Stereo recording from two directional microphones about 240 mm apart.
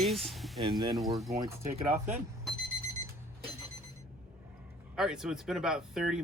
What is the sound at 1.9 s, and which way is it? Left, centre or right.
Speech, centre.